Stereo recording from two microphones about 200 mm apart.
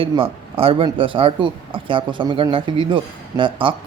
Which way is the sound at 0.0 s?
25° right (ahead or behind).